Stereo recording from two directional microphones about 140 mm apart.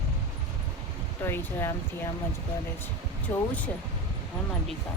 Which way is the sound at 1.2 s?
15° left (ahead or behind).